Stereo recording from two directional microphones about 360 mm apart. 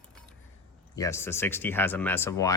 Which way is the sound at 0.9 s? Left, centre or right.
Centre.